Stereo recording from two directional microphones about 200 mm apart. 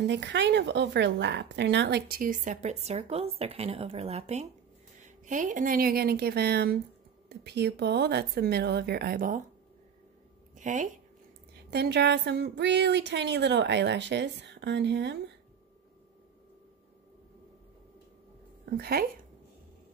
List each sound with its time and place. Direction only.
0.0 s a woman's voice: 60° right (ahead or behind); by 9.4 s 45° right (ahead or behind)
10.5 s a sound: 40° right (ahead or behind)
11.7 s speech: 55° right (ahead or behind)
18.8 s a woman's voice: 50° right (ahead or behind)